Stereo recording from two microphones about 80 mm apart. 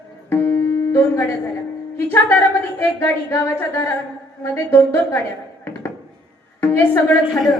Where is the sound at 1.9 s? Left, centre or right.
Left.